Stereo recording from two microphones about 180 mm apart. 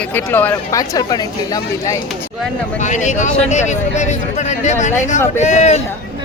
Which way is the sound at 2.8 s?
40° left (ahead or behind).